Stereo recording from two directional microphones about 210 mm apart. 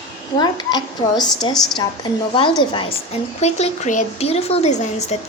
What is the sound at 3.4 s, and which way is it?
Speech, 35° left (ahead or behind).